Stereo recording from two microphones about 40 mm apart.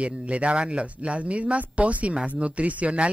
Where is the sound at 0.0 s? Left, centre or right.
Right.